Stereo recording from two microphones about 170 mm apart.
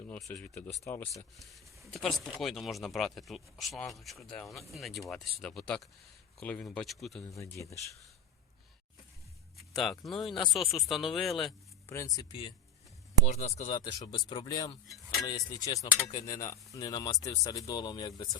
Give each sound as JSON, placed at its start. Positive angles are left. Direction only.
{"t": 0.3, "sound": "speech", "side_deg": 5}
{"t": 1.1, "sound": "speech", "side_deg": 0}
{"t": 7.3, "sound": "speech", "side_deg": 15}
{"t": 9.6, "sound": "a sound", "side_deg": 0}
{"t": 10.1, "sound": "speech", "side_deg": 0}
{"t": 11.9, "sound": "speech", "side_deg": 20}
{"t": 13.2, "sound": "speech", "side_deg": 45}